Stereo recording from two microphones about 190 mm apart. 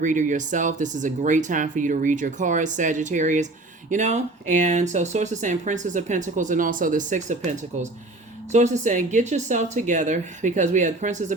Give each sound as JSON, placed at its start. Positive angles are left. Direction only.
{"t": 0.0, "sound": "speech", "side_deg": -40}